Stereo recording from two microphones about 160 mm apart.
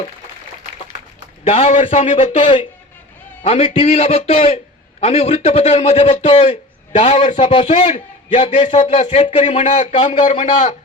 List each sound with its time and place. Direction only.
1.5 s a man's voice: 40° left (ahead or behind)